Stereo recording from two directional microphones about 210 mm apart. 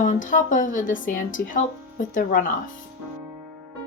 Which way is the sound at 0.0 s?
40° left (ahead or behind).